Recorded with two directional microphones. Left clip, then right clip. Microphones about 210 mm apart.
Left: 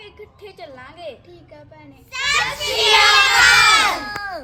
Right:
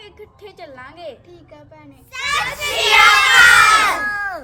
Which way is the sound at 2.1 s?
50° right (ahead or behind).